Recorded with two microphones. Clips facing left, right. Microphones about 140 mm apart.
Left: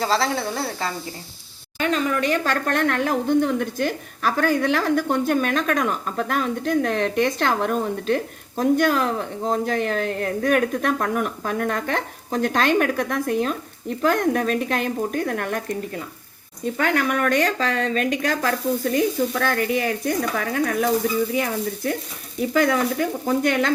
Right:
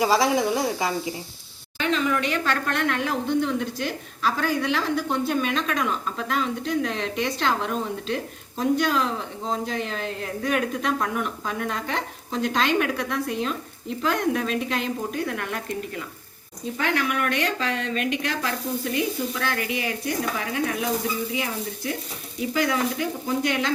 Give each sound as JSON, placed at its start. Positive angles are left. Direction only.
{"t": 0.0, "sound": "speech", "side_deg": -10}
{"t": 1.8, "sound": "a woman's voice", "side_deg": 45}